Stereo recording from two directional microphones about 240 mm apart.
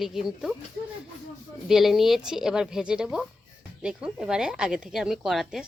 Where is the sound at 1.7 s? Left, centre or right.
Centre.